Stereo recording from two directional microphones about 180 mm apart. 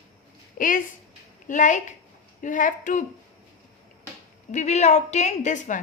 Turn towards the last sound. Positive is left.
turn(degrees=45)  # may be behind; listen again after turning